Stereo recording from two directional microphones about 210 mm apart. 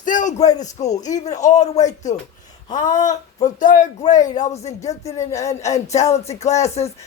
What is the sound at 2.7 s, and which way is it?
Speech, 35° left (ahead or behind).